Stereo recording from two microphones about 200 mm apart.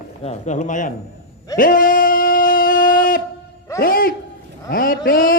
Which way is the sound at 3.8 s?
45° left (ahead or behind).